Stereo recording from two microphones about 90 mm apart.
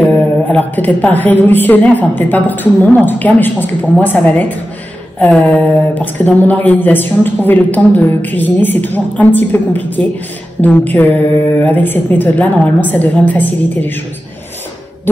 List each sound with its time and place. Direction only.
0.5 s a woman's voice: 15° left (ahead or behind)